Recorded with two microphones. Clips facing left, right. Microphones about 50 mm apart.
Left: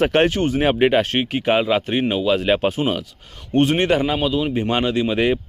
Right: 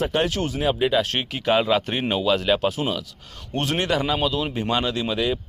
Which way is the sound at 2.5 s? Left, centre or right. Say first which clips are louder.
Left 3 dB; left.